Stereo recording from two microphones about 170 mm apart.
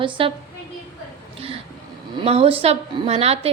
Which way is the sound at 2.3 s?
35° right (ahead or behind).